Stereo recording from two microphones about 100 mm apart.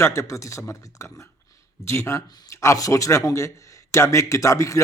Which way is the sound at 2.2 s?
45° left (ahead or behind).